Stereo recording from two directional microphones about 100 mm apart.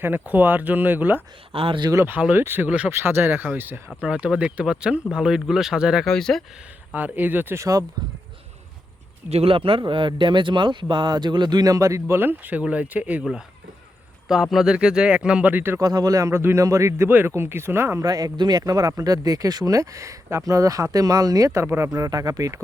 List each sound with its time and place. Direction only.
0.0 s speech: 20° right (ahead or behind)
1.5 s speech: 70° right (ahead or behind)
1.8 s speech: 35° right (ahead or behind)
2.0 s speech: 20° right (ahead or behind)
2.9 s speech: 25° right (ahead or behind); by 6.1 s 5° right (ahead or behind)
6.1 s speech: 5° left (ahead or behind)
6.9 s speech: 15° right (ahead or behind)
7.6 s speech: 35° right (ahead or behind)
9.3 s speech: 75° right (ahead or behind); by 13.2 s 15° right (ahead or behind)
14.3 s speech: 5° right (ahead or behind); by 15.8 s 20° right (ahead or behind)
15.8 s speech: 40° right (ahead or behind); by 18.0 s 25° right (ahead or behind)
18.0 s speech: 40° right (ahead or behind)